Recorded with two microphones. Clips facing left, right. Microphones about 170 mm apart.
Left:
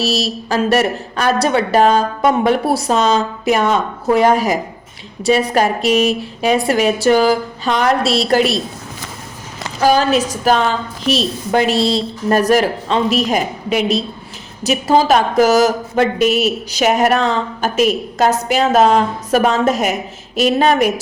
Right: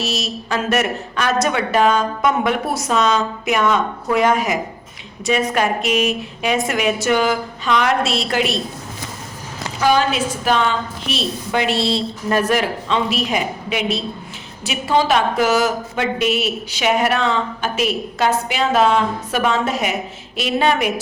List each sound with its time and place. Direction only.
0.0 s speech: 35° left (ahead or behind)
9.8 s speech: 40° left (ahead or behind)